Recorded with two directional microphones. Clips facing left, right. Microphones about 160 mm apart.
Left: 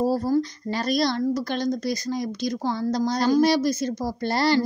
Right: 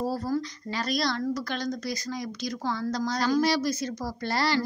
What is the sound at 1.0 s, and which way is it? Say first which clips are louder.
A woman's voice: left 5 dB; 25° left (ahead or behind).